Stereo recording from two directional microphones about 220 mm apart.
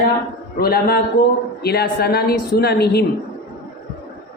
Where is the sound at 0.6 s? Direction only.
45° left (ahead or behind).